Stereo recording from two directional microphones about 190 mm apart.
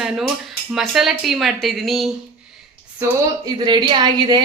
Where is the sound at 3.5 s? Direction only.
25° right (ahead or behind).